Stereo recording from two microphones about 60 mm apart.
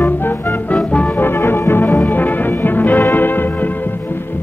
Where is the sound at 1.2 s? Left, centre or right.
Left.